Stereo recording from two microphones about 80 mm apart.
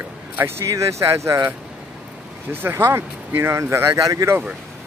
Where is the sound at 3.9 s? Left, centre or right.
Right.